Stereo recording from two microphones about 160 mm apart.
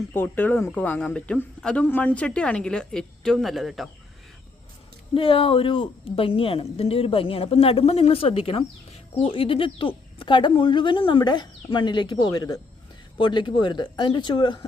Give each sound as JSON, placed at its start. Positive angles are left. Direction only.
{"t": 0.1, "sound": "speech", "side_deg": 10}
{"t": 5.1, "sound": "a woman's voice", "side_deg": 35}